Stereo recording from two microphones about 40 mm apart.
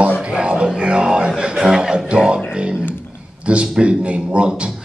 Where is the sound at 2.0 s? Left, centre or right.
Right.